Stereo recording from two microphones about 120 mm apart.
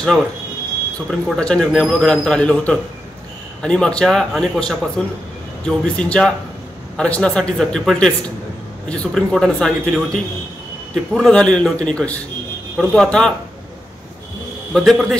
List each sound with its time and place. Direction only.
0.9 s speech: 10° left (ahead or behind)
14.7 s speech: centre (ahead or behind)